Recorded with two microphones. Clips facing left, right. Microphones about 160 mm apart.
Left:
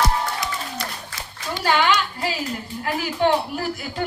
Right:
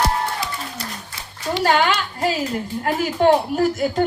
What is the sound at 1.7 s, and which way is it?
A woman's voice, 45° right (ahead or behind).